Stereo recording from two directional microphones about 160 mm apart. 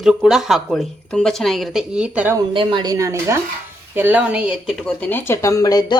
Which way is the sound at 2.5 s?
30° right (ahead or behind).